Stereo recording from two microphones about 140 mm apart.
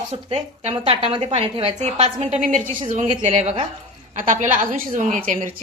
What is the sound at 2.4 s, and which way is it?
Speech, 70° right (ahead or behind).